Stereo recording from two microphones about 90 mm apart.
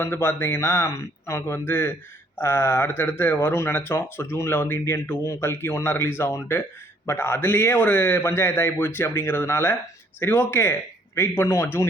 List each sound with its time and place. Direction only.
0.0 s speech: 25° left (ahead or behind)